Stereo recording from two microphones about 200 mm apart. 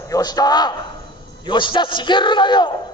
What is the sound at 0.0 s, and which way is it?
A man's voice, 20° left (ahead or behind).